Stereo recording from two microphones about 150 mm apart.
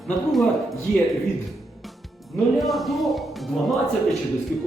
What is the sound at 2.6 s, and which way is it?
A man's voice, centre (ahead or behind).